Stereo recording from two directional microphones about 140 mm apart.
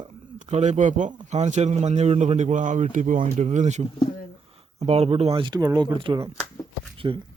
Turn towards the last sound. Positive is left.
turn(degrees=-30)  # may be behind; listen again after turning